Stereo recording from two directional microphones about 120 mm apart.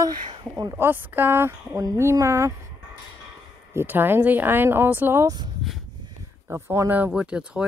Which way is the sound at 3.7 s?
15° right (ahead or behind).